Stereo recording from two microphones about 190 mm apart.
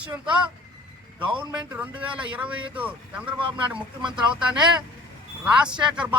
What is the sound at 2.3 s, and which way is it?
A man's voice, 10° right (ahead or behind).